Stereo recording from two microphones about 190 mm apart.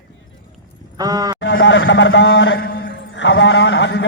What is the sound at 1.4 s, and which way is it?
A man's voice, 75° left (ahead or behind).